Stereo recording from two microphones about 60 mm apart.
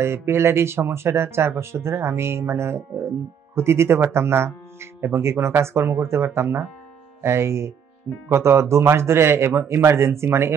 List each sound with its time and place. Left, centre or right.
0.0 s speech: right